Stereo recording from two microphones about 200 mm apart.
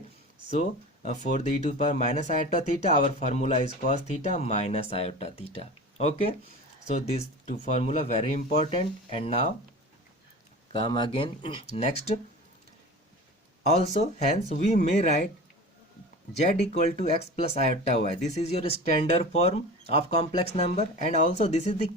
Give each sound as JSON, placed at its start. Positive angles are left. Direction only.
{"t": 0.5, "sound": "speech", "side_deg": 35}
{"t": 10.7, "sound": "speech", "side_deg": 25}
{"t": 13.9, "sound": "speech", "side_deg": 35}
{"t": 16.4, "sound": "speech", "side_deg": 35}